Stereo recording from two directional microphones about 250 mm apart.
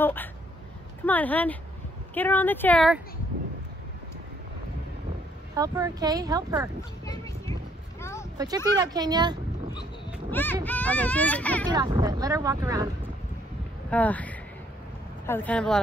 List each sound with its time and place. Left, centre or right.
0.0 s speech: centre
5.6 s speech: centre
7.1 s speech: centre
8.0 s vehicle: centre
8.7 s speech: centre
10.3 s speech: centre
11.7 s speech: centre
13.8 s speech: centre